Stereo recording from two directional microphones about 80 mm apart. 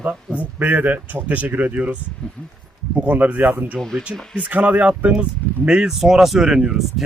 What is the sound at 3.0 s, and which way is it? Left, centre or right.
Speech, centre.